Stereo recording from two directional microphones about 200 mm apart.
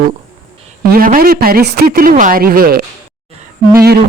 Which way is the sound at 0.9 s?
45° right (ahead or behind).